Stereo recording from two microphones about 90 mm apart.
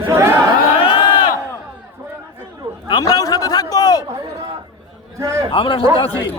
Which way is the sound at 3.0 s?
40° left (ahead or behind).